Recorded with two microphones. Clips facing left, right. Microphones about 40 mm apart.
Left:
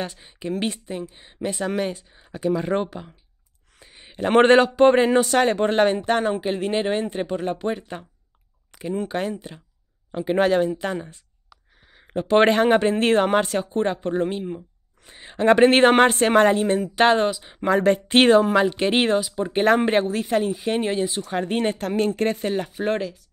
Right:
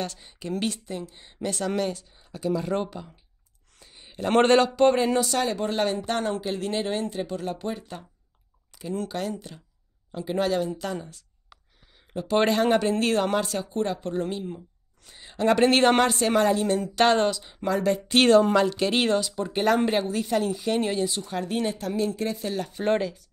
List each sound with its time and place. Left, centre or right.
0.0 s speech: centre
3.9 s a sound: left
4.3 s a man's voice: left
10.1 s a man's voice: left
16.8 s speech: centre
17.6 s a man's voice: left
21.3 s speech: left
22.5 s speech: left
22.8 s speech: centre